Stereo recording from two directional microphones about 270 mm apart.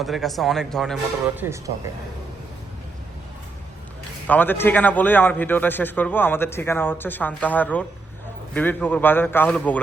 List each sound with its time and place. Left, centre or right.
0.0 s speech: centre
1.4 s speech: centre
4.3 s a man's voice: centre